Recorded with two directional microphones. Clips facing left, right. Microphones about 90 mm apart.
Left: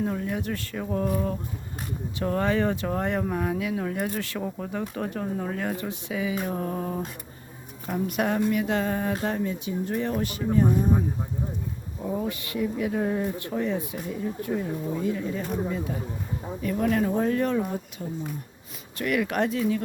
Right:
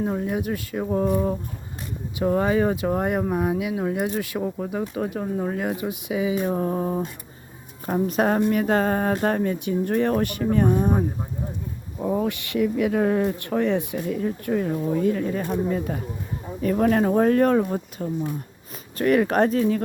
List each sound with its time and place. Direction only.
0.0 s speech: 20° right (ahead or behind); by 11.0 s 60° right (ahead or behind)
12.0 s speech: 75° right (ahead or behind); by 18.1 s 50° right (ahead or behind)
18.9 s speech: 40° right (ahead or behind)